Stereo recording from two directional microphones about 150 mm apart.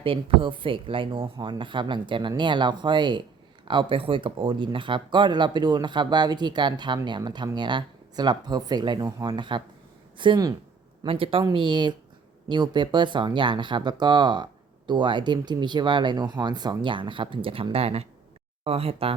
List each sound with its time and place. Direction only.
0.0 s speech: 35° right (ahead or behind)